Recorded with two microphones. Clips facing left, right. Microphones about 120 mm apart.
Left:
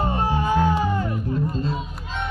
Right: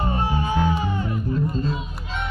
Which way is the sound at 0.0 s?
45° left (ahead or behind).